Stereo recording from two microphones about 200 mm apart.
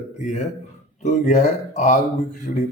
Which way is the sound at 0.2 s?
35° left (ahead or behind).